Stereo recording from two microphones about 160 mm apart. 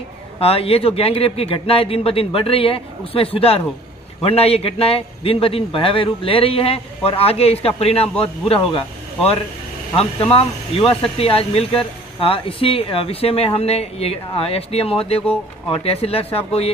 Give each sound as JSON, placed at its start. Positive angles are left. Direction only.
{"t": 0.4, "sound": "speech", "side_deg": 35}